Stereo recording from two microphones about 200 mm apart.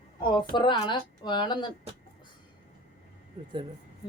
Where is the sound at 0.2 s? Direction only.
20° left (ahead or behind).